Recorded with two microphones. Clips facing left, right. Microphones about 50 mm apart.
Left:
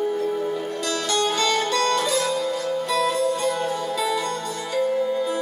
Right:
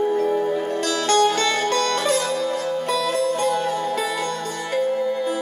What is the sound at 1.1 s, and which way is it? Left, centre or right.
Music, right.